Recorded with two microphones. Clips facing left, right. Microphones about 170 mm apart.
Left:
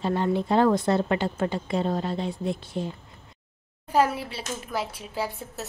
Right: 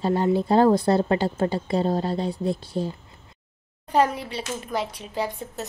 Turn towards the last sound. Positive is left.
turn(degrees=5)  # may be behind; listen again after turning